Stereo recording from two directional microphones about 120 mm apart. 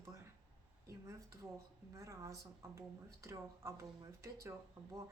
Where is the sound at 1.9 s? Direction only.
25° right (ahead or behind).